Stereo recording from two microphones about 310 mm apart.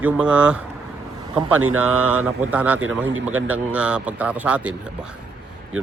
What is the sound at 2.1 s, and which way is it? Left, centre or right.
Speech, centre.